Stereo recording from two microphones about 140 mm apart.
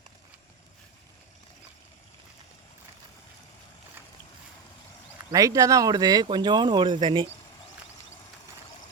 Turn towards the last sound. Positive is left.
turn(degrees=-35)  # may be behind; listen again after turning